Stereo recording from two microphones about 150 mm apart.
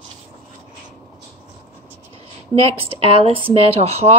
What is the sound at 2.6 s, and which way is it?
A woman's voice, 40° right (ahead or behind).